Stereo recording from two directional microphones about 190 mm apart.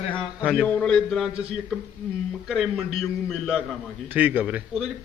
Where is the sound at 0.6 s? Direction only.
5° left (ahead or behind).